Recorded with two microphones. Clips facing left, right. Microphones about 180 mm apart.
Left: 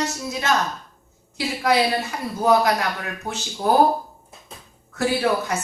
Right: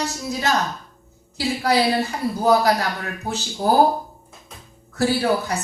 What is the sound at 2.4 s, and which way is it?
Speech, 35° right (ahead or behind).